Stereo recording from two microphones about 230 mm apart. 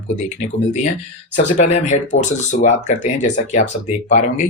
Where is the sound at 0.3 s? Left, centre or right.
Left.